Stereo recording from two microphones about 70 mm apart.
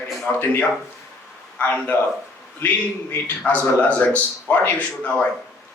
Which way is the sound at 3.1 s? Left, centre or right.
Left.